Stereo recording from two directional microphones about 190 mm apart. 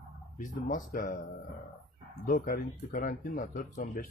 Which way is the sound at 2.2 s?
45° left (ahead or behind).